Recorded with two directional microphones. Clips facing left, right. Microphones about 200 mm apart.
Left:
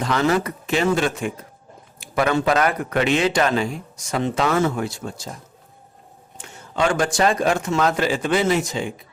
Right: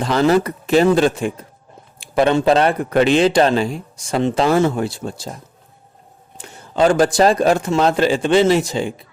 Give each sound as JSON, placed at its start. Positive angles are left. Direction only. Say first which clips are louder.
{"t": 0.0, "sound": "speech", "louder": "right 5 dB", "side_deg": -35}
{"t": 6.3, "sound": "speech", "louder": "right 5 dB", "side_deg": -35}